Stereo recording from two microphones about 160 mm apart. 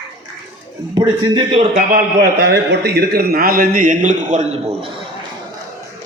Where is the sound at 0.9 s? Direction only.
30° right (ahead or behind).